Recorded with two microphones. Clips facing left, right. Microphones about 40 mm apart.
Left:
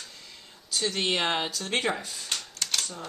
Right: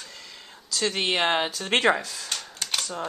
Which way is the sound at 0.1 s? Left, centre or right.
Right.